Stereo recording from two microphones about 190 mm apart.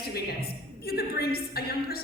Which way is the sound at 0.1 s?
55° left (ahead or behind).